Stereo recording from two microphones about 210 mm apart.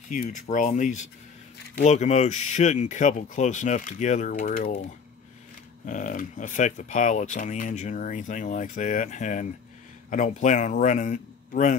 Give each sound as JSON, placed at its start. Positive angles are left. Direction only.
{"t": 0.1, "sound": "speech", "side_deg": 35}
{"t": 5.9, "sound": "speech", "side_deg": 40}